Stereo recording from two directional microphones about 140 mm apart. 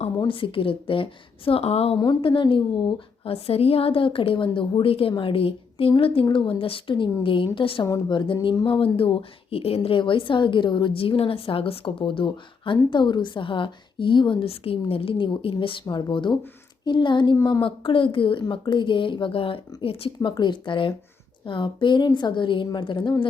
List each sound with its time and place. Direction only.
0.3 s a woman's voice: 40° left (ahead or behind)
2.0 s speech: 35° left (ahead or behind)